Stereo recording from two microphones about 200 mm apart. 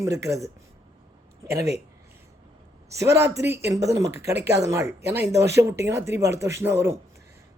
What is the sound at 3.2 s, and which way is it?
Speech, 15° right (ahead or behind).